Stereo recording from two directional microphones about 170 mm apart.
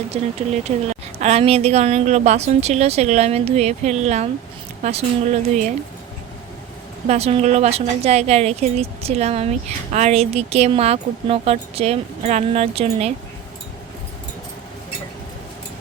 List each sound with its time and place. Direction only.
0.1 s a woman's voice: 40° right (ahead or behind)
7.1 s a woman's voice: 35° right (ahead or behind)